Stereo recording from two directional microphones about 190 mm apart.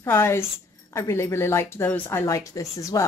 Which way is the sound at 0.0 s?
15° left (ahead or behind).